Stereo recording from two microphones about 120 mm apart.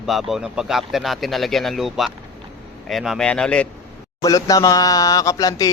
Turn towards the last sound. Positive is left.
turn(degrees=30)  # may be behind; listen again after turning